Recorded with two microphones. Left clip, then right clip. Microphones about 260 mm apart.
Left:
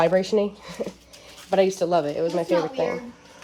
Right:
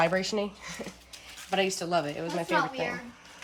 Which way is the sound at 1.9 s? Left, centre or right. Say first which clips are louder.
Left 7 dB; centre.